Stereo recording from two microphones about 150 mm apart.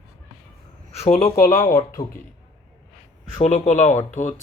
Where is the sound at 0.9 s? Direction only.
40° left (ahead or behind).